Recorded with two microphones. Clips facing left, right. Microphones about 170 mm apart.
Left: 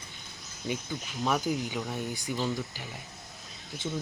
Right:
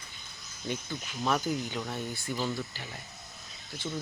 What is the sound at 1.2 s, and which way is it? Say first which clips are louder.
Speech: left 1 dB; 10° left (ahead or behind).